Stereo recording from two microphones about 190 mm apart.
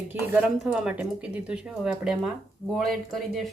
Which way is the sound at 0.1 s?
5° right (ahead or behind).